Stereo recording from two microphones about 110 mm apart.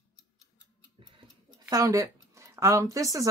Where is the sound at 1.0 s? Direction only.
40° right (ahead or behind).